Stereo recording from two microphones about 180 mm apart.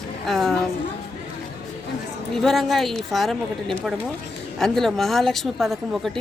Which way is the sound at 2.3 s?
Centre (ahead or behind).